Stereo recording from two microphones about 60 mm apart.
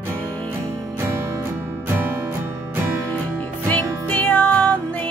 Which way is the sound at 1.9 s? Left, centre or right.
Right.